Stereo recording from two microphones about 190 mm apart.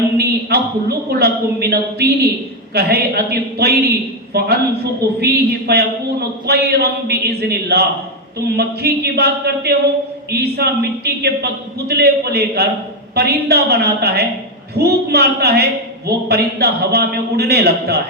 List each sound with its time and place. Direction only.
0.2 s a man's voice: 55° right (ahead or behind)